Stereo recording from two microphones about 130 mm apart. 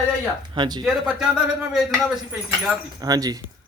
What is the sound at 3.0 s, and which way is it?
Speech, 30° right (ahead or behind).